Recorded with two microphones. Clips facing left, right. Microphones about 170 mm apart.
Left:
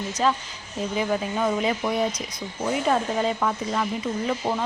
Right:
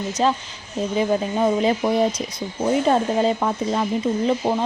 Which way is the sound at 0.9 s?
30° right (ahead or behind).